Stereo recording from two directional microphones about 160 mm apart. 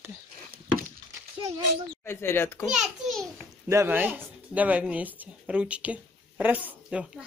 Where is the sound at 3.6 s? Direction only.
15° right (ahead or behind).